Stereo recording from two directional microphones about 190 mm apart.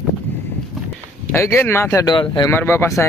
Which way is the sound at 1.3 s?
15° left (ahead or behind).